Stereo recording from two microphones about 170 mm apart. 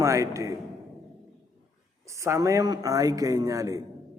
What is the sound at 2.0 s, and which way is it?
A man's voice, 15° right (ahead or behind).